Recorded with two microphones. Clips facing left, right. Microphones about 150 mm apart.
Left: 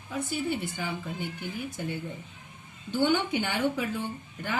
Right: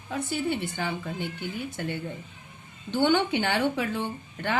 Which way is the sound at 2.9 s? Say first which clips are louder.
Right 3 dB; 70° right (ahead or behind).